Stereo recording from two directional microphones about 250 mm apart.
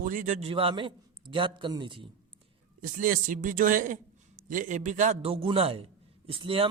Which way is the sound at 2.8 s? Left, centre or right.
Right.